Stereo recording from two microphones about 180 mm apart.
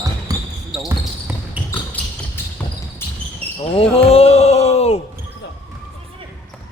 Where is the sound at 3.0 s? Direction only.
15° left (ahead or behind).